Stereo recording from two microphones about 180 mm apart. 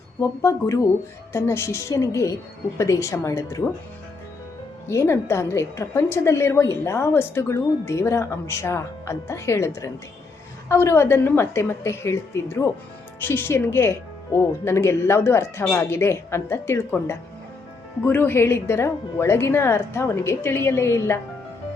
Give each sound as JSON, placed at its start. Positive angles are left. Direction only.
{"t": 0.2, "sound": "a woman's voice", "side_deg": 15}
{"t": 4.9, "sound": "a woman's voice", "side_deg": 15}